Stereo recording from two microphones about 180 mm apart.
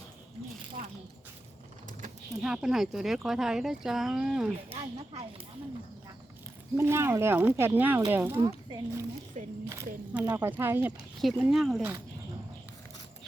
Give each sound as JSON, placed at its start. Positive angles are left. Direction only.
{"t": 2.4, "sound": "speech", "side_deg": -5}
{"t": 6.7, "sound": "speech", "side_deg": -15}